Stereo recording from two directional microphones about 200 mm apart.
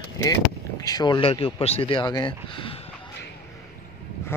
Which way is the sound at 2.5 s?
25° left (ahead or behind).